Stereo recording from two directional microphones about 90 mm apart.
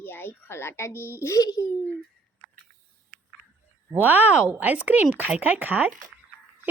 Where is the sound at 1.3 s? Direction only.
40° left (ahead or behind).